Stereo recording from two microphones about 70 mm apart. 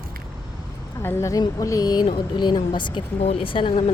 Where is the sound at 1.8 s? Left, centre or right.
Left.